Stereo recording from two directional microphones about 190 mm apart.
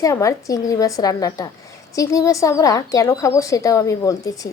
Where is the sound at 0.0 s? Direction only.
15° left (ahead or behind).